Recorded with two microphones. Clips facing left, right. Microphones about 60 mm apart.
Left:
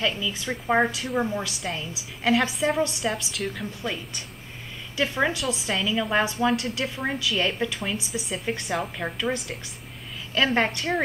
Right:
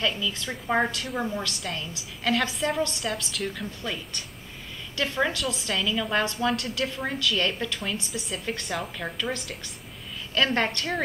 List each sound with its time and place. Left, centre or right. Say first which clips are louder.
0.0 s a woman's voice: left 1 dB; centre
3.1 s a woman's voice: left 2 dB; centre